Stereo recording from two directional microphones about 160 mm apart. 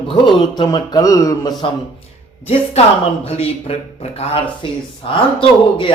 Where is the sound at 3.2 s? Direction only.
40° left (ahead or behind).